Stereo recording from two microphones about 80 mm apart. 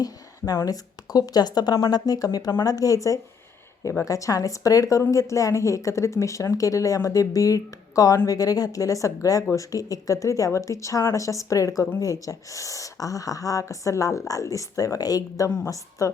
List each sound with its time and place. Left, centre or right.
0.6 s a woman's voice: left